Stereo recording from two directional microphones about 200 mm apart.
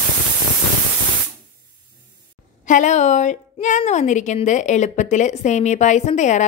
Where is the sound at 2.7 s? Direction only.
40° left (ahead or behind).